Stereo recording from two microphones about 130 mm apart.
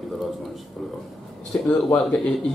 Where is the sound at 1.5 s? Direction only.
15° left (ahead or behind).